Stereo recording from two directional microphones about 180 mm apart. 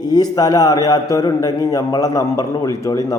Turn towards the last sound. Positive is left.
turn(degrees=15)  # may be behind; listen again after turning